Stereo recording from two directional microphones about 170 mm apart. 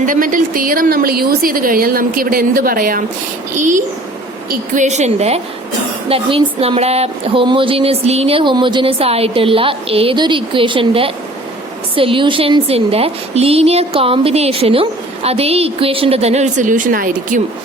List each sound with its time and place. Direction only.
0.0 s a woman's voice: 50° right (ahead or behind)